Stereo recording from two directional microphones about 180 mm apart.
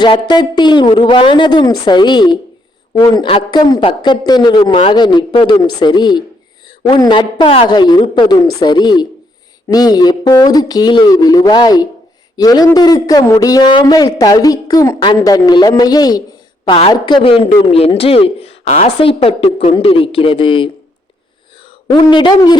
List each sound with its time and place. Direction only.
0.0 s a man's voice: 25° left (ahead or behind)